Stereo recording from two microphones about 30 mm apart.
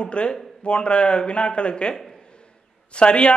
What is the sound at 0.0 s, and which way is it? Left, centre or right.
A man's voice, left.